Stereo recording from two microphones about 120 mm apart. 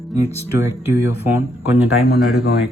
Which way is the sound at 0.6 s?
20° right (ahead or behind).